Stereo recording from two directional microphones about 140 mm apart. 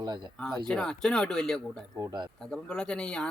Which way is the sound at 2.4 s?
5° left (ahead or behind).